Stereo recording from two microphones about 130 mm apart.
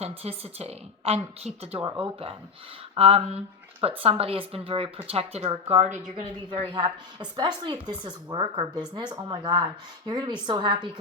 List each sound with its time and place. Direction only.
0.0 s a woman's voice: 50° right (ahead or behind)
6.5 s a woman's voice: 40° right (ahead or behind)